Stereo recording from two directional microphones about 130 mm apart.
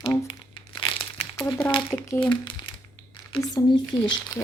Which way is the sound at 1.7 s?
40° left (ahead or behind).